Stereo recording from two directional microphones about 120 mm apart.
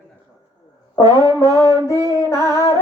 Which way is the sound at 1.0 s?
30° right (ahead or behind).